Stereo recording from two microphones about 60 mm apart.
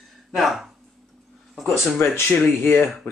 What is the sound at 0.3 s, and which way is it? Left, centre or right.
Speech, centre.